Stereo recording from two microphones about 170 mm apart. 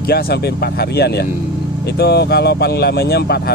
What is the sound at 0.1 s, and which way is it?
Speech, 70° left (ahead or behind).